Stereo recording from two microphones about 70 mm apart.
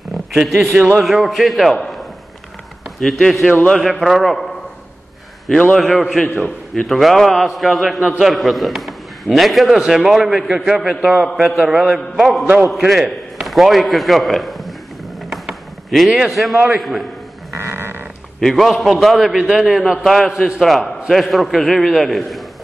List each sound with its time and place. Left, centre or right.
0.1 s a man's voice: centre
3.0 s a man's voice: centre
3.4 s a man's voice: centre
3.7 s a man's voice: centre
5.8 s a man's voice: centre
6.2 s a man's voice: left
6.7 s a man's voice: centre
15.2 s a sound: centre
16.7 s a man's voice: centre
17.5 s a sound: right
18.4 s a man's voice: centre
20.3 s a man's voice: centre